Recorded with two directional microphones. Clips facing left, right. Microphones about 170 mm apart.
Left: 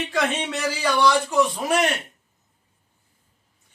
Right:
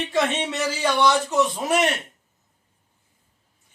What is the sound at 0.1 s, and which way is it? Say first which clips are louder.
Speech: right 3 dB; 25° right (ahead or behind).